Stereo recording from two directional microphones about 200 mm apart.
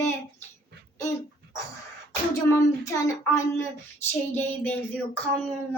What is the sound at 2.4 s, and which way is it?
A child's voice, 15° left (ahead or behind).